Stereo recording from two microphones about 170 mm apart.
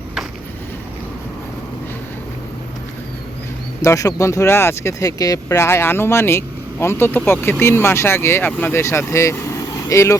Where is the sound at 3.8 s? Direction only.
20° left (ahead or behind).